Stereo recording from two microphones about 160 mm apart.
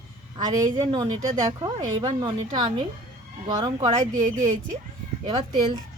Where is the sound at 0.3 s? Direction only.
25° right (ahead or behind).